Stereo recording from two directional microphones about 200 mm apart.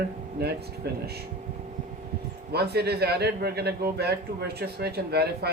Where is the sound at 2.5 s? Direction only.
55° right (ahead or behind).